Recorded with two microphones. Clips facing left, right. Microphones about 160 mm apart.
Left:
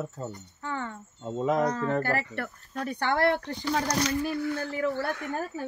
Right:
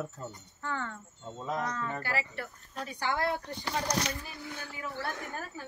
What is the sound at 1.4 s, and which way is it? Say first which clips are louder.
Speech: left 9 dB; 90° left.